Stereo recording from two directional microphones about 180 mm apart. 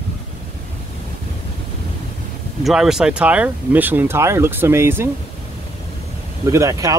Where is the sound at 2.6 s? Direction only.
5° right (ahead or behind).